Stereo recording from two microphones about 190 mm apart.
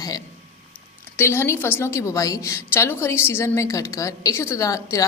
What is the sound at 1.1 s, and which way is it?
A woman's voice, 10° left (ahead or behind).